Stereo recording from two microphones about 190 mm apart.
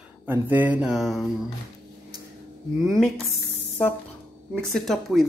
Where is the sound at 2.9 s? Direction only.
Centre (ahead or behind).